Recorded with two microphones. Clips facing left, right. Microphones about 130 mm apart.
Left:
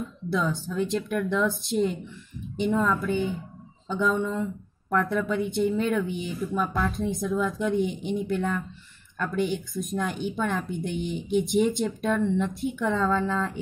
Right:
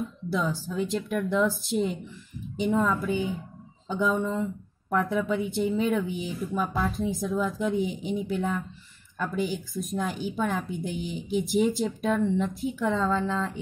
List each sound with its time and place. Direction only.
0.3 s a woman's voice: 5° right (ahead or behind)
2.8 s a woman's voice: 15° right (ahead or behind); by 13.6 s centre (ahead or behind)